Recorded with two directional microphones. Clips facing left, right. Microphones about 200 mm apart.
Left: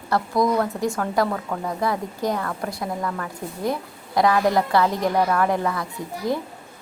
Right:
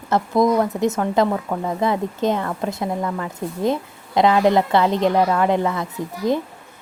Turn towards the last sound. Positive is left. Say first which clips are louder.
# right 4 dB
turn(degrees=-20)  # may be behind; listen again after turning